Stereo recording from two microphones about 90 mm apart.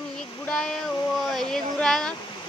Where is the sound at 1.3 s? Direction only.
5° left (ahead or behind).